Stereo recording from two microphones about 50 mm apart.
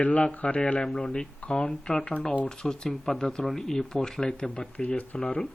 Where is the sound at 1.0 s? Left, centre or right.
Centre.